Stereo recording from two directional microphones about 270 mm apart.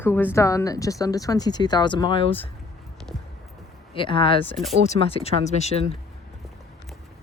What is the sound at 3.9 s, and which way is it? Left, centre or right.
Speech, centre.